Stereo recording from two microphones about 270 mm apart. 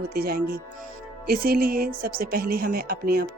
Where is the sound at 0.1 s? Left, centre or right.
Right.